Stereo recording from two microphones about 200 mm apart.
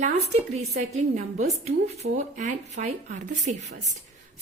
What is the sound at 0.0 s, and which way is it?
A woman's voice, 35° right (ahead or behind).